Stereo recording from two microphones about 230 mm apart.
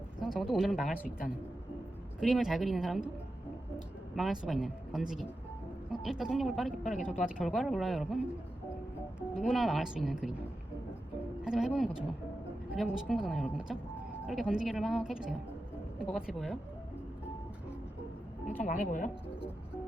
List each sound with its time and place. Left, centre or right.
0.2 s speech: centre
2.2 s speech: centre
4.1 s speech: centre
9.3 s speech: centre
11.4 s speech: centre
18.4 s speech: left